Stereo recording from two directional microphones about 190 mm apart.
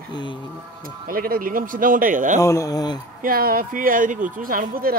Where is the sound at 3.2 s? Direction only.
50° right (ahead or behind).